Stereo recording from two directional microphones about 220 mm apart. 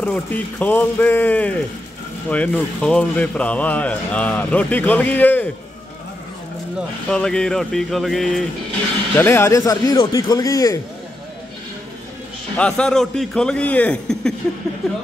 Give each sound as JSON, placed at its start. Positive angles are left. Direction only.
{"t": 0.0, "sound": "speech", "side_deg": 5}
{"t": 7.1, "sound": "a man's voice", "side_deg": 5}
{"t": 12.5, "sound": "a man's voice", "side_deg": 5}